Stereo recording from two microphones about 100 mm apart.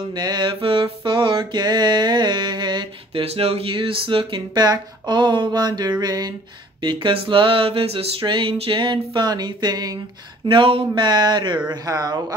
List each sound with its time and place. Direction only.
0.1 s mantra: 45° right (ahead or behind)
3.3 s speech: 90° right; by 6.3 s 40° right (ahead or behind)
6.8 s a sound: 55° right (ahead or behind)
10.4 s speech: 55° right (ahead or behind)
11.7 s speech: 40° right (ahead or behind)